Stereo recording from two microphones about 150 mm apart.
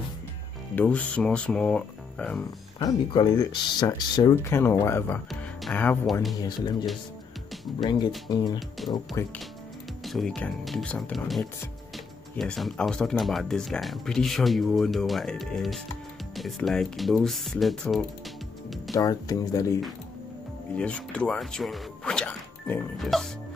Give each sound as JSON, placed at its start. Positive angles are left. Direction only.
{"t": 0.7, "sound": "speech", "side_deg": 10}
{"t": 2.8, "sound": "speech", "side_deg": 30}
{"t": 4.5, "sound": "speech", "side_deg": 15}
{"t": 5.3, "sound": "music", "side_deg": 0}
{"t": 6.1, "sound": "speech", "side_deg": 0}
{"t": 6.4, "sound": "speech", "side_deg": 30}
{"t": 8.5, "sound": "speech", "side_deg": 0}
{"t": 9.2, "sound": "speech", "side_deg": 20}
{"t": 10.0, "sound": "speech", "side_deg": 0}
{"t": 18.9, "sound": "speech", "side_deg": 25}
{"t": 20.7, "sound": "speech", "side_deg": 5}